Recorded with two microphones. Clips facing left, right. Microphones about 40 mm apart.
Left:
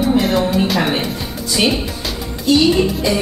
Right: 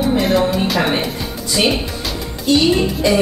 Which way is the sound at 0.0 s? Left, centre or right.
Centre.